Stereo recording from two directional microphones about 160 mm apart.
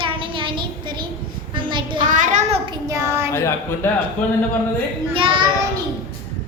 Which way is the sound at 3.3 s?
15° left (ahead or behind).